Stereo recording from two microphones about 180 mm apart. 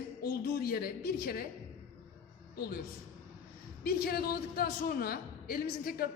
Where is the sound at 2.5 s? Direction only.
55° left (ahead or behind).